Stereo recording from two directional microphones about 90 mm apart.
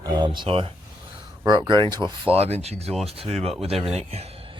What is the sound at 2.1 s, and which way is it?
Speech, 85° right.